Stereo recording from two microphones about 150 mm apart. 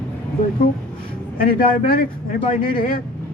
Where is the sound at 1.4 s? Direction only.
70° left (ahead or behind).